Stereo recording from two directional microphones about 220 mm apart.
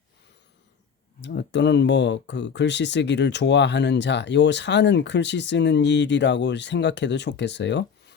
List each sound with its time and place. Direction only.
1.2 s speech: 50° left (ahead or behind)